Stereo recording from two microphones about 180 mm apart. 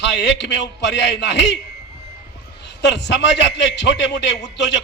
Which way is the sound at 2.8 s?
75° left (ahead or behind).